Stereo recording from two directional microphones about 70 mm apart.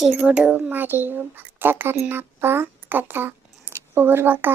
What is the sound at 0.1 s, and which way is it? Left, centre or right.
A child's voice, right.